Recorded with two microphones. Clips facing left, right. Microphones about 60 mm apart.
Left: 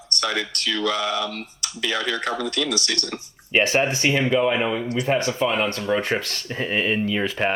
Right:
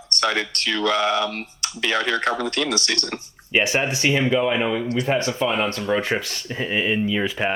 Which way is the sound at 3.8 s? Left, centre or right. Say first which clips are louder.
Even; left.